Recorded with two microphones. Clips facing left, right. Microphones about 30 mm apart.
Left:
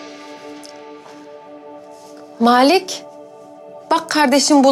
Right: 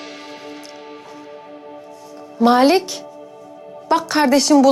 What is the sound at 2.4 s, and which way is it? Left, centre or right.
A woman's voice, centre.